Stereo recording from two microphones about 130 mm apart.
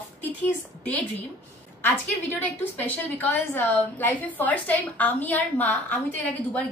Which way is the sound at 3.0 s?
15° left (ahead or behind).